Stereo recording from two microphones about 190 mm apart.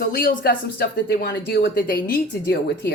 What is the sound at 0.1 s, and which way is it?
Speech, 50° left (ahead or behind).